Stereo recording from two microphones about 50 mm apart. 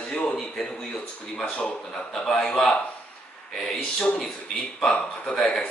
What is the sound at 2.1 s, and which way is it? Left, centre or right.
Speech, centre.